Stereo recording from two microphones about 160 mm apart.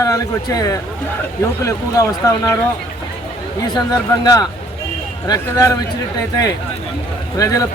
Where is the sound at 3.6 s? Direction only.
25° left (ahead or behind).